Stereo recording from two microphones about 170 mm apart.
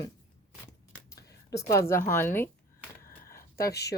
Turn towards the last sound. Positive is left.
turn(degrees=70)  # may be behind; listen again after turning